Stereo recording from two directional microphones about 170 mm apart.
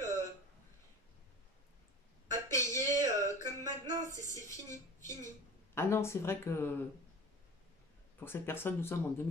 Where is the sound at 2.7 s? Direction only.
20° right (ahead or behind).